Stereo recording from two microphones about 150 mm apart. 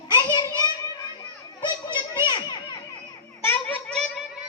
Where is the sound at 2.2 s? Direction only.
30° left (ahead or behind).